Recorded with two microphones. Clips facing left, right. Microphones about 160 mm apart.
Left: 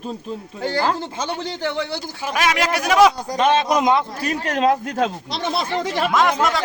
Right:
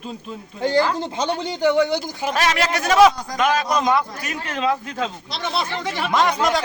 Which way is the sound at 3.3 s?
30° left (ahead or behind).